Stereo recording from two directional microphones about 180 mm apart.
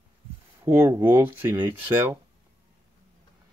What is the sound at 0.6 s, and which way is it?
Speech, 15° right (ahead or behind).